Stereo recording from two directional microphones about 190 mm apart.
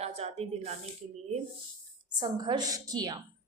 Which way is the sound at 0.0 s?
35° right (ahead or behind).